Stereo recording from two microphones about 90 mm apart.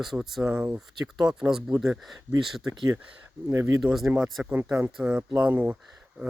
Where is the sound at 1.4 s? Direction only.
5° right (ahead or behind).